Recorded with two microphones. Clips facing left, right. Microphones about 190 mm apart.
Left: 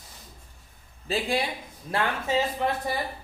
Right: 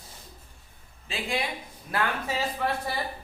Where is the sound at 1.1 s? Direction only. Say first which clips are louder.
Left 4 dB; 35° left (ahead or behind).